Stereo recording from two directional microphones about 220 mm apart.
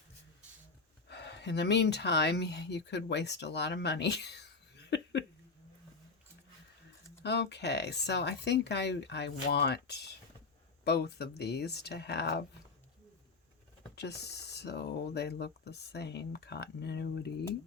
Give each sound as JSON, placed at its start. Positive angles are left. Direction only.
{"t": 1.0, "sound": "speech", "side_deg": 50}
{"t": 7.2, "sound": "speech", "side_deg": 50}
{"t": 13.9, "sound": "speech", "side_deg": 50}